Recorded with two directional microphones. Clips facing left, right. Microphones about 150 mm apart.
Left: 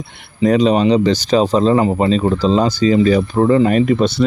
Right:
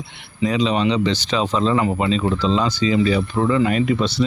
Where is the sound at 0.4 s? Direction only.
45° left (ahead or behind).